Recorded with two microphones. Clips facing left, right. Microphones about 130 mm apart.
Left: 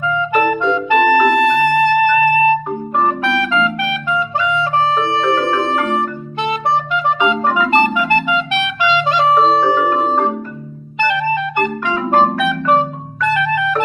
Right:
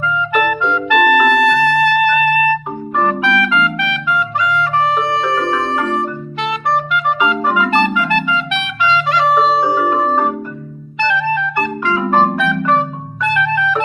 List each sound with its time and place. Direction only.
0.3 s music: 25° left (ahead or behind)
6.4 s music: 25° left (ahead or behind)
7.5 s clarinet: 20° left (ahead or behind)
11.0 s clarinet: 20° left (ahead or behind)
12.4 s music: 20° left (ahead or behind)